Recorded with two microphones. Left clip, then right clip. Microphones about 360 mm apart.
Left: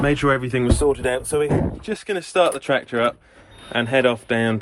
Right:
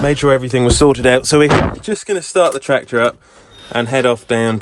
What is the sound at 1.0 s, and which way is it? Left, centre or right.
Speech, right.